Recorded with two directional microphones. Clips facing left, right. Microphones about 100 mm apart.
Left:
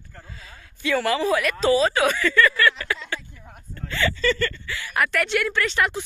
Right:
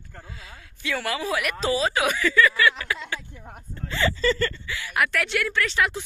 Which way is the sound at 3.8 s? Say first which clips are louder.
Even; 25° right (ahead or behind).